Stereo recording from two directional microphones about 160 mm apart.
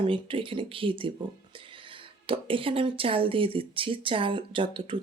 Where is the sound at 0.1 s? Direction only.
35° right (ahead or behind).